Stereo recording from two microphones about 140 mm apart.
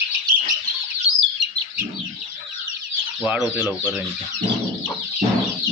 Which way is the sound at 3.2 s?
10° right (ahead or behind).